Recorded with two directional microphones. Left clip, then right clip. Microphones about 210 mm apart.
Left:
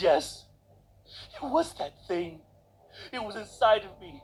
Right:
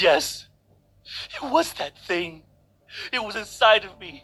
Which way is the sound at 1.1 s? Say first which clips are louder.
Right 6 dB; 20° right (ahead or behind).